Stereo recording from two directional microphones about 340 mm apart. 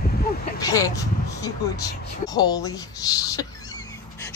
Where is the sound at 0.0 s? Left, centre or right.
Left.